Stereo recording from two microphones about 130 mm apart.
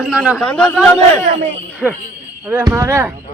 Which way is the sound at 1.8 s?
5° left (ahead or behind).